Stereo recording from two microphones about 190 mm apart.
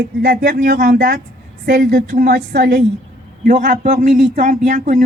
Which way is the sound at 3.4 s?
40° right (ahead or behind).